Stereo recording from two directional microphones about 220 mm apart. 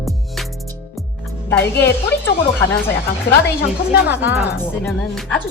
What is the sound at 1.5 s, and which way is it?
Speech, 10° left (ahead or behind).